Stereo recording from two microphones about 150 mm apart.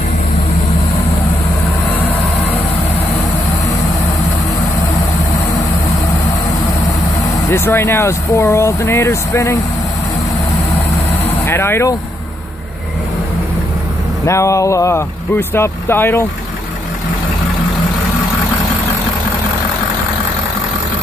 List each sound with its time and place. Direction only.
7.4 s speech: 15° left (ahead or behind)
11.4 s speech: 15° left (ahead or behind)
14.2 s speech: 20° left (ahead or behind)